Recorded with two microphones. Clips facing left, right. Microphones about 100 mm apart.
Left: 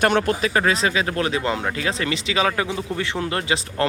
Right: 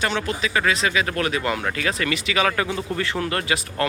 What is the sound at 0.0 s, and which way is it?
Speech, 50° left (ahead or behind).